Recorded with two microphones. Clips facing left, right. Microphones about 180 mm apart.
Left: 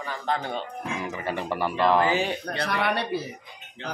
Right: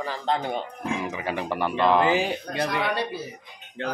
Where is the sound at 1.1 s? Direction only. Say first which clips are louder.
Right 1 dB; centre (ahead or behind).